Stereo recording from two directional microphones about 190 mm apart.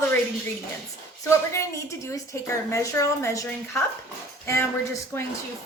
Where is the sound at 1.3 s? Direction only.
15° left (ahead or behind).